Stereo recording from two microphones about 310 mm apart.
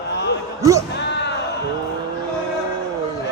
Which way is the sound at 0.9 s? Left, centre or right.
Left.